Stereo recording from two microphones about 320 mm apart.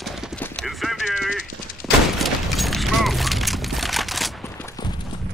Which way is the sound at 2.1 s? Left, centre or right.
Centre.